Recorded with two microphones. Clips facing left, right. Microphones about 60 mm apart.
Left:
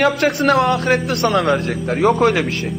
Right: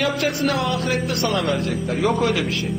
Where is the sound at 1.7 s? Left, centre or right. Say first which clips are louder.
Left 5 dB; left.